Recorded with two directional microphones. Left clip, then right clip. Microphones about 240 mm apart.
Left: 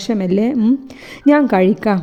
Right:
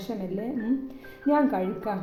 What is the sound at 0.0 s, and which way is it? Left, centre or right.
A woman's voice, left.